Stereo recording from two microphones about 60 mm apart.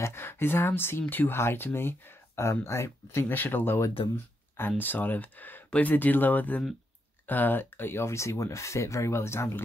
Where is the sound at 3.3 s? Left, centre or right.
Left.